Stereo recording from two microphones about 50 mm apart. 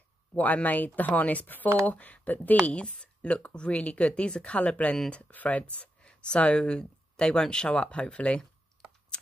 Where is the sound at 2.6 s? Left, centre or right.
Left.